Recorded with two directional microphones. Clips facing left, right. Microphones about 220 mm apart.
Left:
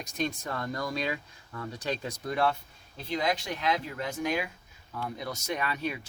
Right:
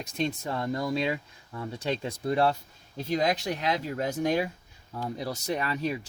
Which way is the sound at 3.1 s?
40° right (ahead or behind).